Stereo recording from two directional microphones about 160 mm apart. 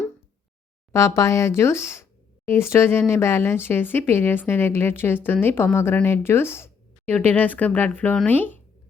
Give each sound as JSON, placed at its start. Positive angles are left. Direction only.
{"t": 0.9, "sound": "a woman's voice", "side_deg": 20}